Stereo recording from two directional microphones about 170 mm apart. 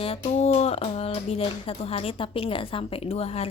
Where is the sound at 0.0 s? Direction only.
35° left (ahead or behind).